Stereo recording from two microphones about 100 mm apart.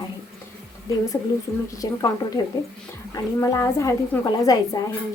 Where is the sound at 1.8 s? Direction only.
35° left (ahead or behind).